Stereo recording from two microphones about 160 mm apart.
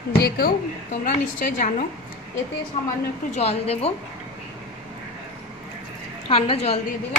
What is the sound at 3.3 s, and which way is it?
Speech, 45° left (ahead or behind).